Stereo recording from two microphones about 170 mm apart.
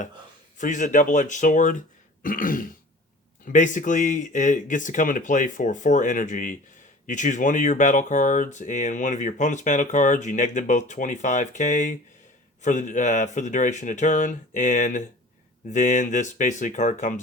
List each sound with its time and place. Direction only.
0.6 s speech: 50° left (ahead or behind)